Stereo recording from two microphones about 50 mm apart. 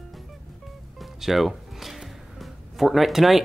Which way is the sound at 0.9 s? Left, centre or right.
Centre.